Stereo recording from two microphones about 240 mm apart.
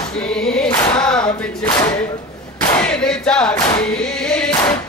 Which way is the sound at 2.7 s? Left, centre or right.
Centre.